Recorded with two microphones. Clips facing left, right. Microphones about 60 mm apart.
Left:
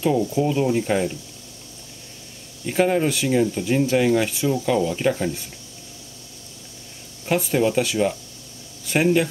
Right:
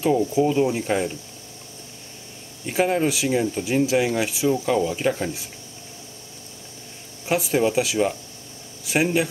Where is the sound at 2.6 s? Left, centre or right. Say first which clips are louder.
Left 1 dB; centre.